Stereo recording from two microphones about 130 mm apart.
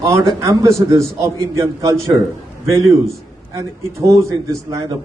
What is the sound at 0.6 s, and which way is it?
A man's voice, 25° right (ahead or behind).